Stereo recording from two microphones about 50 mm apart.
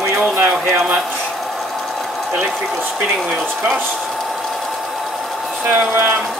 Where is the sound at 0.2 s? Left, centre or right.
Right.